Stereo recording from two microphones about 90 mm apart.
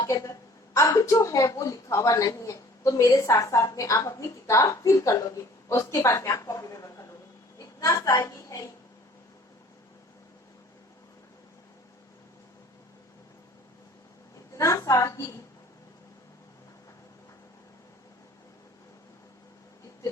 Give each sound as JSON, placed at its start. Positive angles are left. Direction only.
{"t": 0.0, "sound": "a woman's voice", "side_deg": 40}
{"t": 14.5, "sound": "speech", "side_deg": 35}